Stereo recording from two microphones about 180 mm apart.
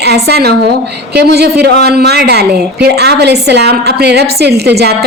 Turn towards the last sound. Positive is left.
turn(degrees=-65)  # may be behind; listen again after turning